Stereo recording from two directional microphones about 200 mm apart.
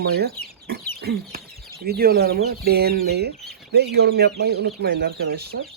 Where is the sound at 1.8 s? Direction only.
50° right (ahead or behind).